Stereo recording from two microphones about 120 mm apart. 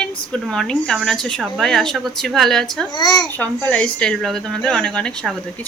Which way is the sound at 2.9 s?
35° left (ahead or behind).